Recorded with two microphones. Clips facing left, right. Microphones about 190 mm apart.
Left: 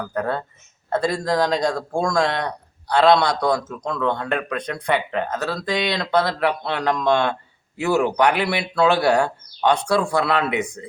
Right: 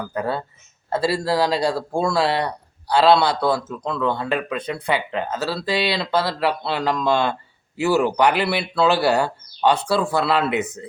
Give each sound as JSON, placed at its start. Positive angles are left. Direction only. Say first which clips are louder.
{"t": 0.0, "sound": "a man's voice", "louder": "even", "side_deg": -5}